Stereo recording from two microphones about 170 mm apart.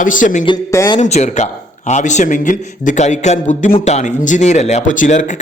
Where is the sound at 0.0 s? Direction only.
50° left (ahead or behind).